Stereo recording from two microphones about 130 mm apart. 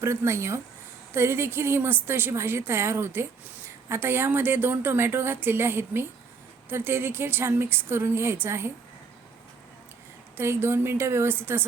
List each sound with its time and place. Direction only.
0.0 s a woman's voice: 20° right (ahead or behind)
10.3 s a woman's voice: 20° right (ahead or behind)